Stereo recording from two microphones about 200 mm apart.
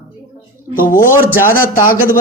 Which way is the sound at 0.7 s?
45° left (ahead or behind).